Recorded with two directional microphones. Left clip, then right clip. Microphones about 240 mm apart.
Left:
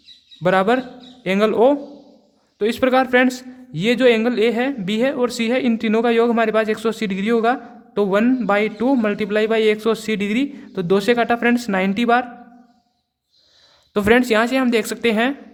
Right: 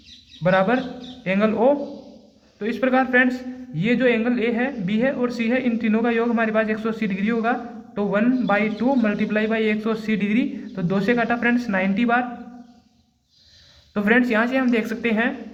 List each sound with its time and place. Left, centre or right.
0.4 s speech: left
13.9 s speech: left